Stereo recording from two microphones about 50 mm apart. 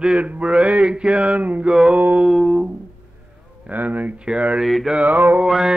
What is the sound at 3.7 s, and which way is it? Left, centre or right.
Mantra, right.